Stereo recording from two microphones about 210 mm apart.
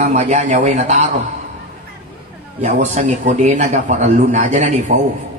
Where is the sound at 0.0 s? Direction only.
35° right (ahead or behind).